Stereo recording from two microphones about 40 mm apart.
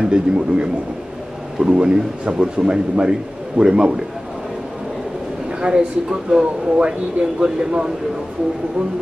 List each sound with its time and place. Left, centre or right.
0.0 s a man's voice: right
1.7 s a man's voice: right
5.6 s a man's voice: centre